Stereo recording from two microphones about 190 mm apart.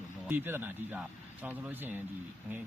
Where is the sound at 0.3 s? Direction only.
10° right (ahead or behind).